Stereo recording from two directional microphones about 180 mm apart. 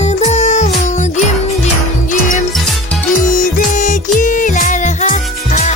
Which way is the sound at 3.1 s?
45° left (ahead or behind).